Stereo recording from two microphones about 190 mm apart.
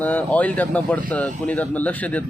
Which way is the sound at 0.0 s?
10° left (ahead or behind).